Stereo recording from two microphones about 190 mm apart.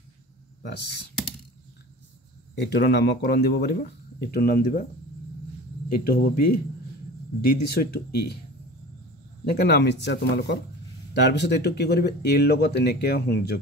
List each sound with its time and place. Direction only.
2.6 s speech: 60° left (ahead or behind)
5.9 s speech: 50° left (ahead or behind)
7.4 s speech: 55° left (ahead or behind)
9.5 s speech: 60° left (ahead or behind)